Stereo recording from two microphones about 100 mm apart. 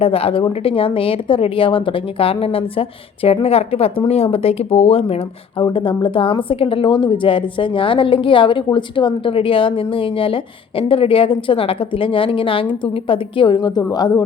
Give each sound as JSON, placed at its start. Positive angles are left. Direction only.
{"t": 0.0, "sound": "speech", "side_deg": 75}
{"t": 3.2, "sound": "speech", "side_deg": 85}
{"t": 5.6, "sound": "speech", "side_deg": 55}